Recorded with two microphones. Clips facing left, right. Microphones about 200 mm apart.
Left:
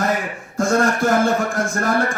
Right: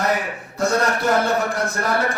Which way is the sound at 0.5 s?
50° left (ahead or behind).